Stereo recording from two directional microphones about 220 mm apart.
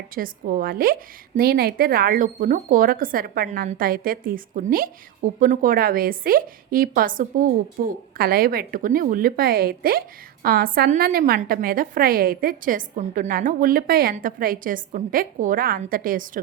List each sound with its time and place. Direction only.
0.1 s speech: 40° right (ahead or behind)